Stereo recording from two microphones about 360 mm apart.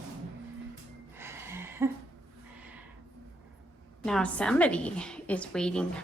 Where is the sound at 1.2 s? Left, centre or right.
Centre.